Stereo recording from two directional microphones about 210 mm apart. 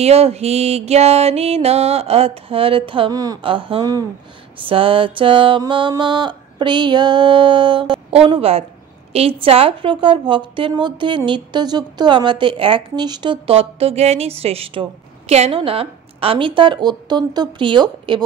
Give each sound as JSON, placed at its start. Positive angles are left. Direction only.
{"t": 0.0, "sound": "a woman's voice", "side_deg": -30}